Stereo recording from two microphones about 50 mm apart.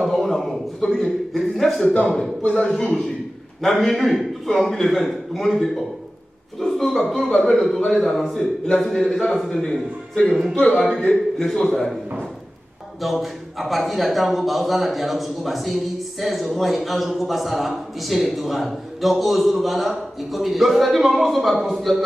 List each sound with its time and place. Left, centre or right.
0.0 s a sound: centre
2.4 s speech: left
2.7 s a man's voice: centre
10.2 s speech: centre
10.5 s speech: left
10.8 s a man's voice: centre
13.0 s a man's voice: centre